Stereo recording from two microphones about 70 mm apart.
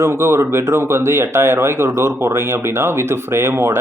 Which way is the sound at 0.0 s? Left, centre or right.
Right.